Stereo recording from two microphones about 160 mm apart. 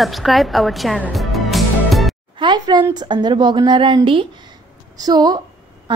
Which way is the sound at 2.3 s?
30° right (ahead or behind).